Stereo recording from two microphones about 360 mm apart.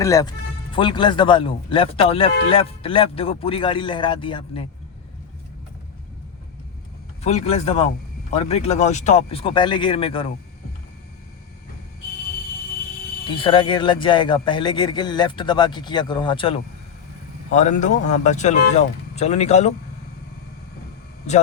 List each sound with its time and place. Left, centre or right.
0.0 s a man's voice: centre
7.2 s a man's voice: centre
13.2 s a man's voice: centre